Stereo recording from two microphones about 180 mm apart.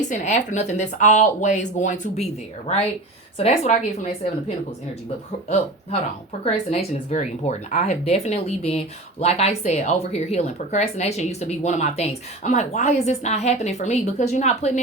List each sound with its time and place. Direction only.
0.1 s speech: 40° left (ahead or behind)
6.4 s speech: 35° left (ahead or behind)